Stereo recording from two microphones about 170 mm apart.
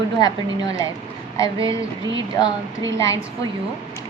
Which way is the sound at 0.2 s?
25° left (ahead or behind).